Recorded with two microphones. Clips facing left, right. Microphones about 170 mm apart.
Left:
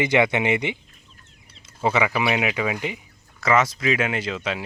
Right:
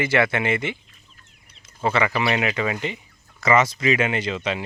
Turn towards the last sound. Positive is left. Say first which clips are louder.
# right 2 dB
turn(degrees=0)  # may be behind; listen again after turning